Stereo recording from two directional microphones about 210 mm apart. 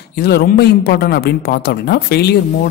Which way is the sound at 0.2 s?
50° left (ahead or behind).